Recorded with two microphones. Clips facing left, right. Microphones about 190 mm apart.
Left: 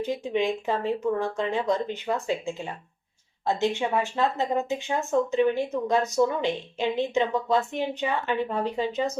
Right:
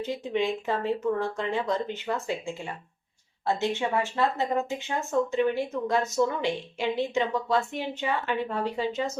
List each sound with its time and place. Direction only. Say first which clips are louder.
0.0 s a woman's voice: left 2 dB; 15° left (ahead or behind)
3.4 s a woman's voice: left 2 dB; 15° left (ahead or behind)